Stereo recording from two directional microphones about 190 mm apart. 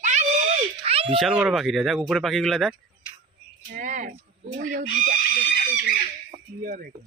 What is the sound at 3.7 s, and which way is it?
Chicken, 45° right (ahead or behind).